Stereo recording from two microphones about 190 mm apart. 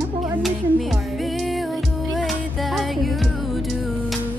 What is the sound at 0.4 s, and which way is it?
Music, centre (ahead or behind).